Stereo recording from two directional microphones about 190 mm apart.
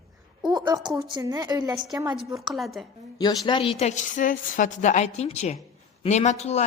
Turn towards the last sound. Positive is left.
turn(degrees=35)  # may be behind; listen again after turning